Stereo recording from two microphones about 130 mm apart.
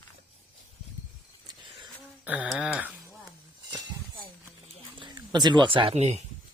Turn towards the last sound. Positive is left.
turn(degrees=-60)  # may be behind; listen again after turning